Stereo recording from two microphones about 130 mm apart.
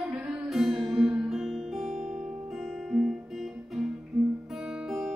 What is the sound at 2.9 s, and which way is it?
Music, centre (ahead or behind).